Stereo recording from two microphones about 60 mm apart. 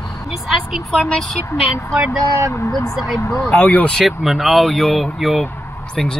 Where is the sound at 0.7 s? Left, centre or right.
Centre.